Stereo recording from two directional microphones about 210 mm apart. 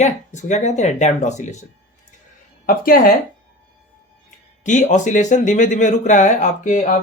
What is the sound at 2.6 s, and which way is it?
Speech, 45° left (ahead or behind).